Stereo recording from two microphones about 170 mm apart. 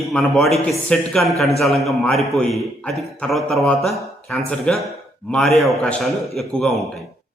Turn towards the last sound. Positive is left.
turn(degrees=5)  # may be behind; listen again after turning